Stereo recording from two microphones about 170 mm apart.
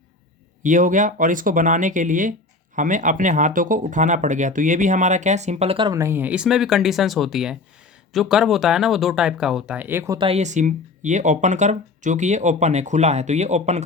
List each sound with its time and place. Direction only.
0.6 s speech: 50° right (ahead or behind); by 5.9 s 35° right (ahead or behind)
5.9 s speech: 15° right (ahead or behind)
10.2 s speech: 35° right (ahead or behind)